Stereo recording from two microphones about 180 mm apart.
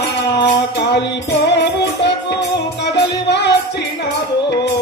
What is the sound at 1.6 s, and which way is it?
Music, 70° left (ahead or behind).